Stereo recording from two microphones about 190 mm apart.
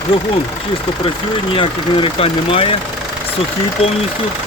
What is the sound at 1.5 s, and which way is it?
Speech, 30° left (ahead or behind).